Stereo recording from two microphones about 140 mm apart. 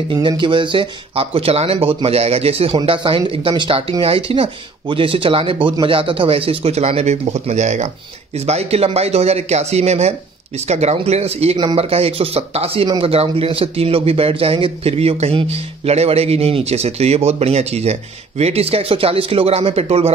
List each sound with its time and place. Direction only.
0.1 s speech: 35° right (ahead or behind)